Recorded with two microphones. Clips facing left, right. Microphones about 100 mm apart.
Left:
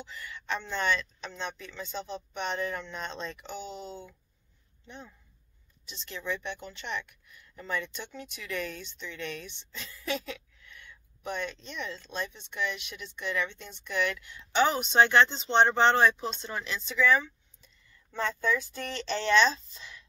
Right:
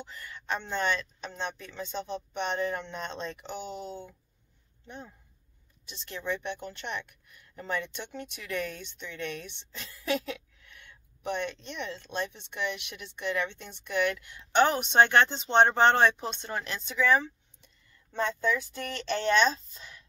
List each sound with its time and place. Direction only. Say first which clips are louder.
0.0 s speech: left 1 dB; 45° right (ahead or behind)
18.9 s speech: left 1 dB; 50° right (ahead or behind)